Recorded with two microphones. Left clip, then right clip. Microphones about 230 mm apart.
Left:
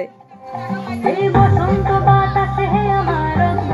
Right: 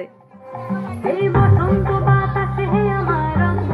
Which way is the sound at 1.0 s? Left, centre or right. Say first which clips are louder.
Left 4 dB; left.